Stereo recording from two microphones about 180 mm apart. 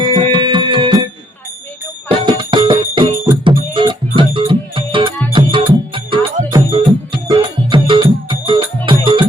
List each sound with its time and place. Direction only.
0.1 s music: 25° right (ahead or behind)
2.0 s music: 25° right (ahead or behind)